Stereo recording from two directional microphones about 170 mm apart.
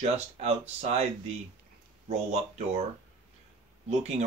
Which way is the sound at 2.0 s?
40° right (ahead or behind).